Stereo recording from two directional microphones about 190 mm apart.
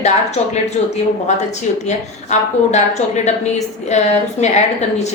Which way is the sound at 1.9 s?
40° left (ahead or behind).